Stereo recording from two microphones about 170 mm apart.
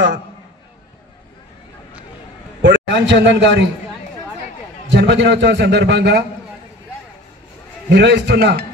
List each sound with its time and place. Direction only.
2.6 s a man's voice: 90° right
4.9 s a man's voice: 90° right
7.9 s a man's voice: 80° right